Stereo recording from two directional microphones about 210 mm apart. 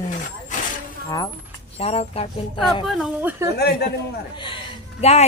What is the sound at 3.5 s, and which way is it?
Speech, 50° left (ahead or behind).